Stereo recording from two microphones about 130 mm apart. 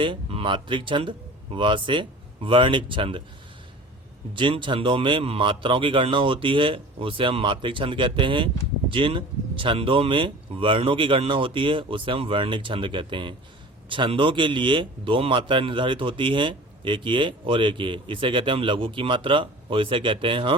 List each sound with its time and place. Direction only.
0.0 s speech: 45° right (ahead or behind)
4.4 s a man's voice: 40° right (ahead or behind)